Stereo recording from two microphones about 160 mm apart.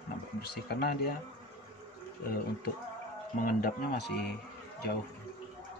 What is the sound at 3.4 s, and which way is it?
Speech, 65° left (ahead or behind).